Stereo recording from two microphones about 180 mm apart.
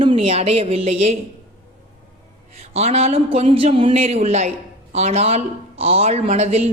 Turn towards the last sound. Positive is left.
turn(degrees=-35)  # may be behind; listen again after turning